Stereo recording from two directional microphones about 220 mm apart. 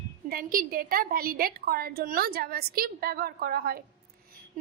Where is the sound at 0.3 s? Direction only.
40° right (ahead or behind).